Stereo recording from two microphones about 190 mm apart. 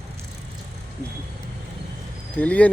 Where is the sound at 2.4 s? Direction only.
5° left (ahead or behind).